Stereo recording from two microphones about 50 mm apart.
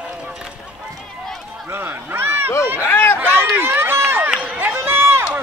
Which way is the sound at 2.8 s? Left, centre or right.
Left.